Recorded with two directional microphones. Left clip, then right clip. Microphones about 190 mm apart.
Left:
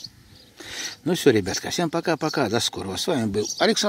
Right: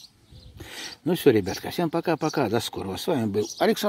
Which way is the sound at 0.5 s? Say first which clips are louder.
Left 5 dB; centre (ahead or behind).